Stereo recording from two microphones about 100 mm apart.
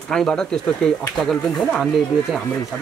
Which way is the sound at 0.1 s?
5° left (ahead or behind).